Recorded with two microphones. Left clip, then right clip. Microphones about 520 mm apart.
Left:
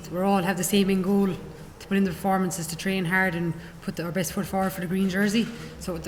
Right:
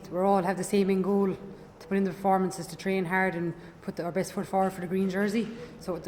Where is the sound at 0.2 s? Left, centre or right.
Left.